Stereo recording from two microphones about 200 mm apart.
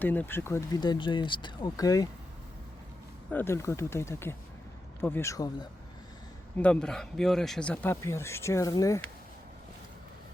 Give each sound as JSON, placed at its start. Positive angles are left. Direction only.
{"t": 0.0, "sound": "speech", "side_deg": 10}
{"t": 3.2, "sound": "speech", "side_deg": 10}
{"t": 6.6, "sound": "speech", "side_deg": 5}